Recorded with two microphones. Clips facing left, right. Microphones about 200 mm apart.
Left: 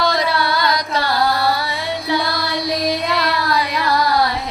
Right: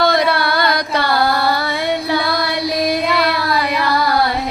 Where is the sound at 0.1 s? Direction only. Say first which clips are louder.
Right 3 dB; 60° right (ahead or behind).